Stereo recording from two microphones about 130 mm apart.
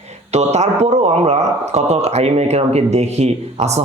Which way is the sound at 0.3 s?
55° right (ahead or behind).